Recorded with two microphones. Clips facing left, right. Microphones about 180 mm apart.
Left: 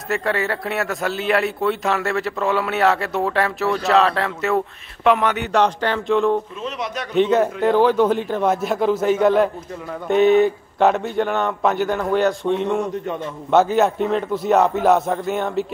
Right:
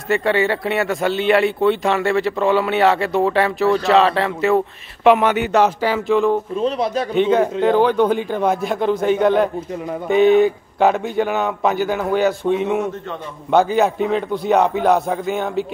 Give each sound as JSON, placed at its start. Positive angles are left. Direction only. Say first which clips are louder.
{"t": 0.1, "sound": "speech", "louder": "right 5 dB", "side_deg": 0}
{"t": 6.6, "sound": "speech", "louder": "right 8 dB", "side_deg": -30}
{"t": 7.2, "sound": "speech", "louder": "even", "side_deg": 0}